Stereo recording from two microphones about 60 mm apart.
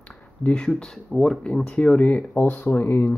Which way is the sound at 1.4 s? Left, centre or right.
Centre.